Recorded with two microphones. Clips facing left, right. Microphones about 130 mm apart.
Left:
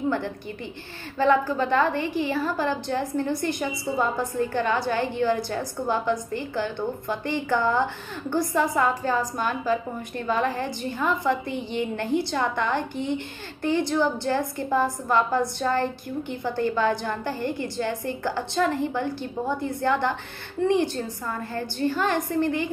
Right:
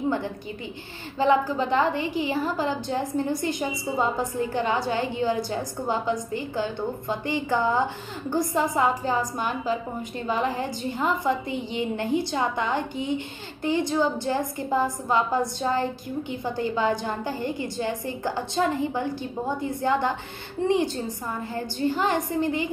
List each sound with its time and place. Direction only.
1.1 s a woman's voice: 20° right (ahead or behind)